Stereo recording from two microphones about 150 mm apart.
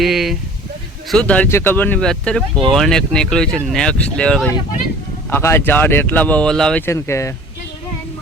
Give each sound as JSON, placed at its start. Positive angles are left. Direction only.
{"t": 0.0, "sound": "speech", "side_deg": 0}
{"t": 5.3, "sound": "speech", "side_deg": 15}
{"t": 6.8, "sound": "speech", "side_deg": 20}